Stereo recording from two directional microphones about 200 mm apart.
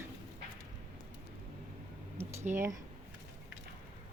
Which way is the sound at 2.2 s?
10° right (ahead or behind).